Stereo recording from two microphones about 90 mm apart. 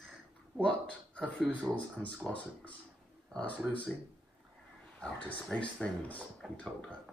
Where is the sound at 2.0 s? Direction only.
15° left (ahead or behind).